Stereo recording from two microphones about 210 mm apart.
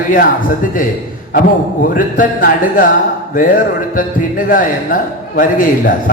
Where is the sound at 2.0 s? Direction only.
40° left (ahead or behind).